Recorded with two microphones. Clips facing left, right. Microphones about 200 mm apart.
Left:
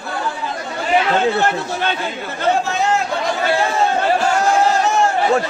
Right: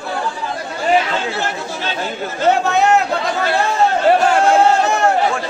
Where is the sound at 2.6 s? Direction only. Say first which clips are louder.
Right 4 dB; 65° right (ahead or behind).